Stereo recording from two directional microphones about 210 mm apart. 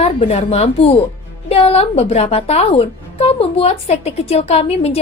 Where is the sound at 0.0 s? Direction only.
30° left (ahead or behind).